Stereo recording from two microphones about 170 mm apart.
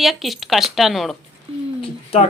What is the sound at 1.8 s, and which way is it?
Cat, 35° left (ahead or behind).